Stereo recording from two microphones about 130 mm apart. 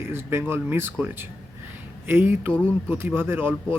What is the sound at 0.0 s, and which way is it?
Speech, 20° right (ahead or behind).